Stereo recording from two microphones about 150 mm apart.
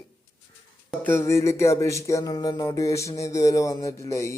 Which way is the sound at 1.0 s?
15° left (ahead or behind).